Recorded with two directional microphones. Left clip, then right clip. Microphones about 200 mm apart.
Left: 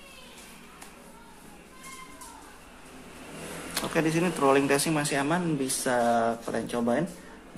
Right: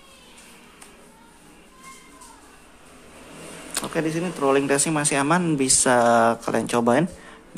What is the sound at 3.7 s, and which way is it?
Speech, 15° right (ahead or behind).